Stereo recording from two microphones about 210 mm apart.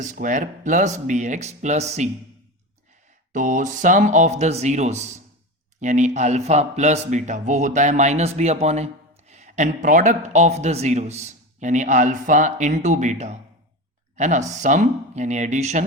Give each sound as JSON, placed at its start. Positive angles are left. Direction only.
{"t": 0.0, "sound": "speech", "side_deg": -35}
{"t": 3.3, "sound": "speech", "side_deg": -40}